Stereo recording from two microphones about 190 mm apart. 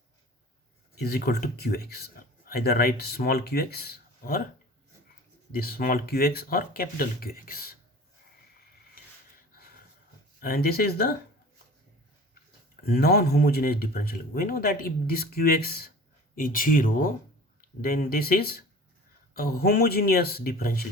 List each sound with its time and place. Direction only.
0.9 s speech: 55° left (ahead or behind)
5.5 s speech: 50° left (ahead or behind)
10.4 s speech: 50° left (ahead or behind)
12.8 s speech: 55° left (ahead or behind)